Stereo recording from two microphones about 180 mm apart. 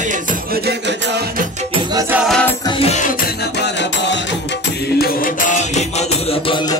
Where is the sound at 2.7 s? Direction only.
35° left (ahead or behind).